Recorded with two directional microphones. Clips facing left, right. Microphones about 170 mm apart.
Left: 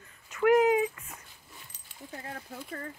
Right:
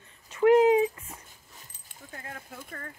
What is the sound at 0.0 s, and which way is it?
Dog, 30° right (ahead or behind).